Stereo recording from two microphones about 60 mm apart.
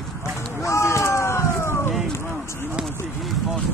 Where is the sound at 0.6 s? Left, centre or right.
Left.